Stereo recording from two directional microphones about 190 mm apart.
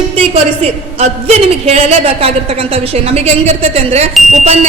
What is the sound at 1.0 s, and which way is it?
A man's voice, 35° right (ahead or behind).